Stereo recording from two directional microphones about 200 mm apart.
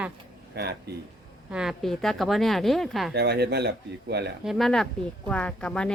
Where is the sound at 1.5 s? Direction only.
5° right (ahead or behind).